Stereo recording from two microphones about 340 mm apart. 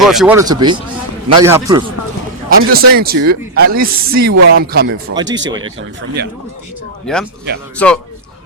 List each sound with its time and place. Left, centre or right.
0.0 s speech: centre
2.5 s speech: right
7.1 s speech: centre